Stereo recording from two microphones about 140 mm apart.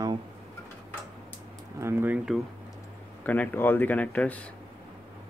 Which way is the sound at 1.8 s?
15° right (ahead or behind).